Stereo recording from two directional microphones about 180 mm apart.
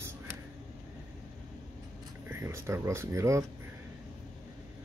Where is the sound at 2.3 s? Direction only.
15° right (ahead or behind).